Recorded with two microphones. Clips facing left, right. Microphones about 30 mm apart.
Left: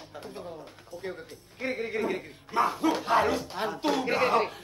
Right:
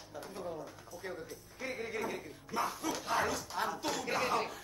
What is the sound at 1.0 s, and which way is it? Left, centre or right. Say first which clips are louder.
A man's voice: left 4 dB; left.